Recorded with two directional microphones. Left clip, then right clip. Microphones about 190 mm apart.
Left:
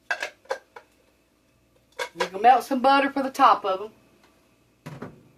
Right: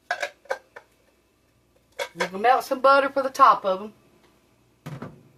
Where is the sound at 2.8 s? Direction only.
35° left (ahead or behind).